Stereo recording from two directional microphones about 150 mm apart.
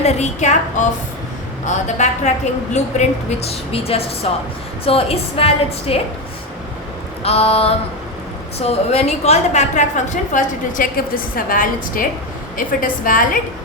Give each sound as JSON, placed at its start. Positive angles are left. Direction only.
{"t": 0.0, "sound": "a woman's voice", "side_deg": 45}
{"t": 7.2, "sound": "a woman's voice", "side_deg": 40}